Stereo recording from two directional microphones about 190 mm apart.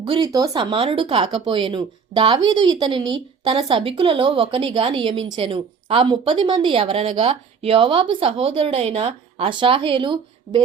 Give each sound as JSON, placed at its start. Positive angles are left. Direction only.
{"t": 0.0, "sound": "a woman's voice", "side_deg": -25}